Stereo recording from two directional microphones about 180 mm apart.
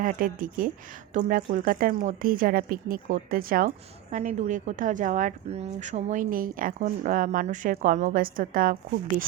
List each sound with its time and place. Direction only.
0.0 s a woman's voice: 50° right (ahead or behind)
4.1 s a woman's voice: 40° right (ahead or behind)